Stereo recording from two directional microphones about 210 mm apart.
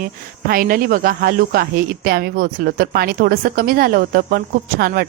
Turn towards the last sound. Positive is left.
turn(degrees=-45)  # may be behind; listen again after turning